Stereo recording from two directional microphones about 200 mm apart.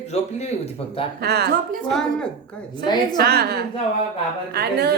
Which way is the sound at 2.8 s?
20° left (ahead or behind).